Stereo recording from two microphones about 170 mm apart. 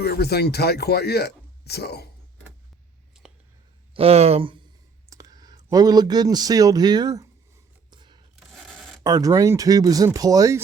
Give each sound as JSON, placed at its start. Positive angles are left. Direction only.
{"t": 0.0, "sound": "speech", "side_deg": 70}
{"t": 3.9, "sound": "speech", "side_deg": -35}
{"t": 5.0, "sound": "speech", "side_deg": -20}
{"t": 7.9, "sound": "a sound", "side_deg": -25}
{"t": 8.5, "sound": "a sound", "side_deg": 0}
{"t": 9.0, "sound": "speech", "side_deg": -20}